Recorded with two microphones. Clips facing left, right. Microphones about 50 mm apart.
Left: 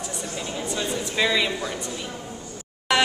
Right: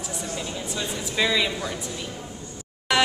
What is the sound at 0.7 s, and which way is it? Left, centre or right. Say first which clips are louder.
Speech: left 2 dB; centre.